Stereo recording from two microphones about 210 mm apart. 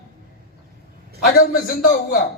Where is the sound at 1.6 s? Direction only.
40° left (ahead or behind).